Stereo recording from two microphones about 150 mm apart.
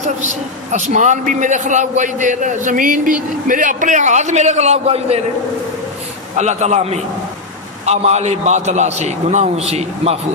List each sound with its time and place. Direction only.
0.0 s a man's voice: 50° right (ahead or behind)
6.3 s a man's voice: 50° right (ahead or behind)